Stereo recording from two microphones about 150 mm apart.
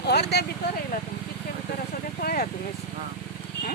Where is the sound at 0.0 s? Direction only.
90° left.